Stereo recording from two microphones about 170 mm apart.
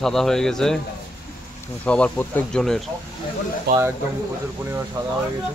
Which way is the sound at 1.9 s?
5° left (ahead or behind).